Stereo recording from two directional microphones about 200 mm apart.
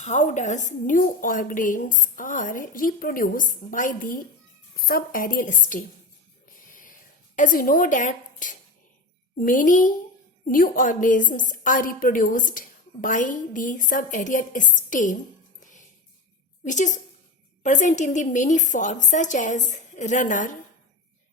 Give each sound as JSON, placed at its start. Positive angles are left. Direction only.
{"t": 0.0, "sound": "a woman's voice", "side_deg": 35}
{"t": 6.7, "sound": "a sound", "side_deg": 45}
{"t": 7.3, "sound": "a woman's voice", "side_deg": 40}
{"t": 16.6, "sound": "a woman's voice", "side_deg": 35}